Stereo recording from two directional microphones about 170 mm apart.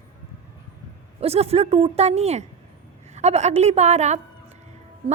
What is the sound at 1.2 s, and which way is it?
A woman's voice, 35° right (ahead or behind).